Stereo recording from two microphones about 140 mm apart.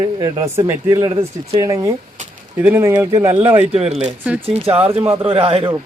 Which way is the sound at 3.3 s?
45° right (ahead or behind).